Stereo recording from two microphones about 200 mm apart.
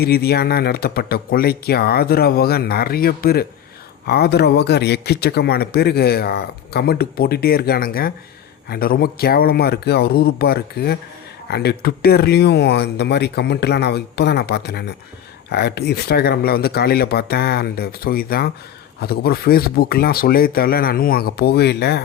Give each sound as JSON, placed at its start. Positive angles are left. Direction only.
{"t": 0.0, "sound": "a man's voice", "side_deg": 50}